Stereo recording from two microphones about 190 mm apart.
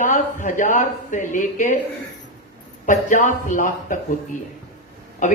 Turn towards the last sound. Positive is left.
turn(degrees=40)  # may be behind; listen again after turning